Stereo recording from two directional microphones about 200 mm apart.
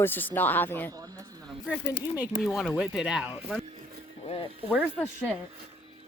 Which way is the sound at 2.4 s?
Centre (ahead or behind).